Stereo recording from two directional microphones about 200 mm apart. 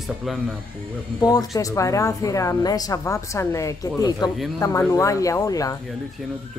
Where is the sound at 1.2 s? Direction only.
20° left (ahead or behind).